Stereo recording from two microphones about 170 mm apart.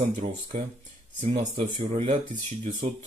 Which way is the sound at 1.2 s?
45° right (ahead or behind).